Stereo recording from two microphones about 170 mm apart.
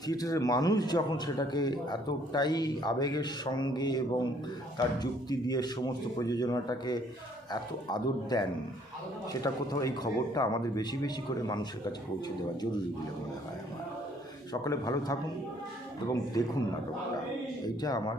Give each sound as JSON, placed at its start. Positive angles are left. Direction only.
{"t": 0.1, "sound": "a man's voice", "side_deg": 20}
{"t": 14.5, "sound": "a man's voice", "side_deg": 20}
{"t": 16.4, "sound": "a man's voice", "side_deg": 20}
{"t": 17.8, "sound": "a man's voice", "side_deg": 25}